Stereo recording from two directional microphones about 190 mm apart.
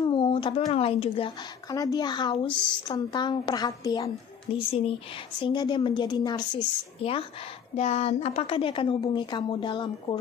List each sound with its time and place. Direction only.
0.0 s speech: 25° left (ahead or behind)
2.5 s speech: 5° left (ahead or behind)
2.9 s a woman's voice: 25° left (ahead or behind)
4.5 s a woman's voice: 30° left (ahead or behind)